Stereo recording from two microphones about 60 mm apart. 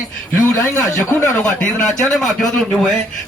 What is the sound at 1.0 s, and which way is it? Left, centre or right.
Speech, left.